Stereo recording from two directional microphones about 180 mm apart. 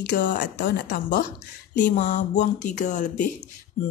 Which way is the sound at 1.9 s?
40° left (ahead or behind).